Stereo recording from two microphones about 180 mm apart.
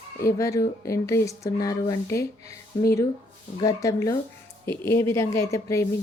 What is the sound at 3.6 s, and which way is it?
Speech, 20° left (ahead or behind).